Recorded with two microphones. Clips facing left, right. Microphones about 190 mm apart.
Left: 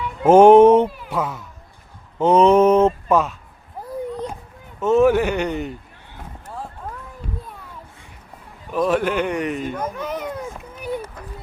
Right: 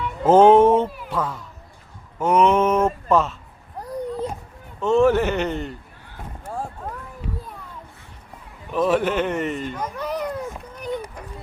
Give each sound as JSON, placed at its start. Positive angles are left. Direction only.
{"t": 0.2, "sound": "speech", "side_deg": 10}
{"t": 2.1, "sound": "mantra", "side_deg": 25}
{"t": 3.1, "sound": "speech", "side_deg": 0}
{"t": 3.8, "sound": "a sound", "side_deg": 0}
{"t": 4.8, "sound": "speech", "side_deg": 5}
{"t": 8.7, "sound": "a child's voice", "side_deg": 0}